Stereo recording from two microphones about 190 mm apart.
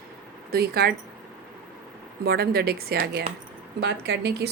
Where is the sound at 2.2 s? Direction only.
55° right (ahead or behind).